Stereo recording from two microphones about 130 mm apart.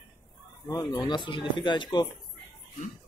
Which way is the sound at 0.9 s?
35° left (ahead or behind).